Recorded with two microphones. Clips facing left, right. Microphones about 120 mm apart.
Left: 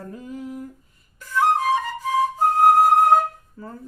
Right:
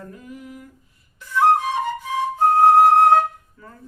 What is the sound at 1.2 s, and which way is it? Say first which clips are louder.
Flute: right 2 dB; 40° left (ahead or behind).